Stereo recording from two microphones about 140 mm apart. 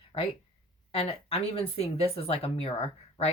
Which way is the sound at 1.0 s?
45° left (ahead or behind).